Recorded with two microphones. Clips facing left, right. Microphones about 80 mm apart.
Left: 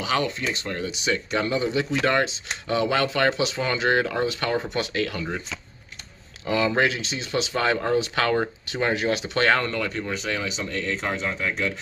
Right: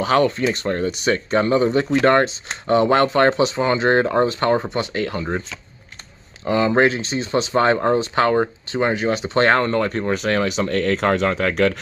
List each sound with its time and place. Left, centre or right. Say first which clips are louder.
0.0 s speech: right 8 dB; right
6.4 s speech: right 5 dB; right